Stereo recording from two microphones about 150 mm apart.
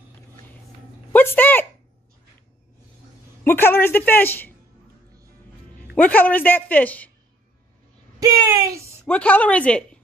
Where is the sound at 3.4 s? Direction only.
15° left (ahead or behind).